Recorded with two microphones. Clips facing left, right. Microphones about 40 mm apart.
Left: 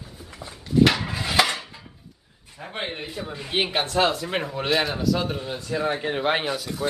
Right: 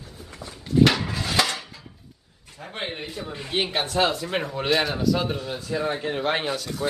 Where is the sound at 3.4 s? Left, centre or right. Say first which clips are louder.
Left 1 dB; centre.